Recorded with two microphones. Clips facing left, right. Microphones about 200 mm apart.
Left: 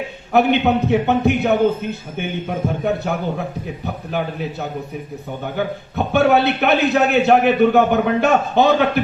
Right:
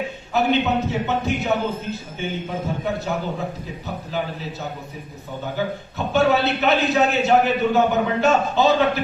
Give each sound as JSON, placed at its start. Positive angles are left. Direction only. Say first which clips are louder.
{"t": 0.3, "sound": "a man's voice", "louder": "left 4 dB", "side_deg": 60}
{"t": 5.5, "sound": "a man's voice", "louder": "left 4 dB", "side_deg": 60}